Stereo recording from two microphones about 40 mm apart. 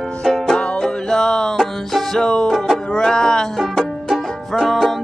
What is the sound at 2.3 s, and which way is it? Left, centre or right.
Music, centre.